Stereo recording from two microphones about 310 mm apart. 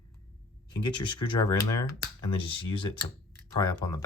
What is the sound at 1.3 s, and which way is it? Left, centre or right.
Speech, centre.